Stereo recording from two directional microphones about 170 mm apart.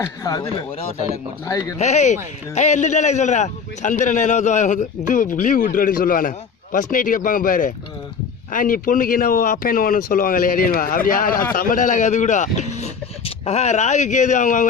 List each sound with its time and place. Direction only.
0.0 s speech: 20° left (ahead or behind)
1.8 s a man's voice: 45° left (ahead or behind)